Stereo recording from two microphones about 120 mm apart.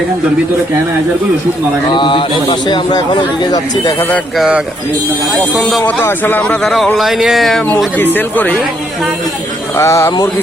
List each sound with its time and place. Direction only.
1.9 s speech: 40° left (ahead or behind)
4.4 s a man's voice: 5° right (ahead or behind)
5.8 s speech: 20° left (ahead or behind); by 7.6 s centre (ahead or behind)
7.9 s speech: 15° left (ahead or behind)
9.7 s speech: 20° left (ahead or behind)